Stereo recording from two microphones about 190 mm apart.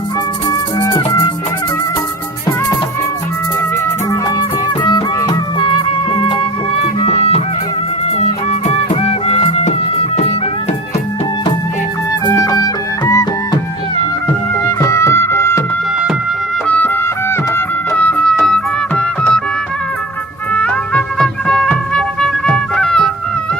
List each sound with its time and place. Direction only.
0.8 s music: 15° left (ahead or behind)
3.8 s music: 20° left (ahead or behind)
8.4 s music: 35° left (ahead or behind)
12.2 s music: 20° left (ahead or behind)
14.8 s music: 15° left (ahead or behind)
16.6 s music: 10° left (ahead or behind)
20.5 s music: 5° left (ahead or behind)